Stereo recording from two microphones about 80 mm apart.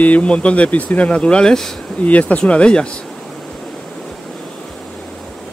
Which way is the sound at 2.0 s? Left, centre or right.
Centre.